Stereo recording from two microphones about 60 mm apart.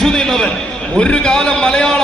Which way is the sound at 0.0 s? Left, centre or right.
Centre.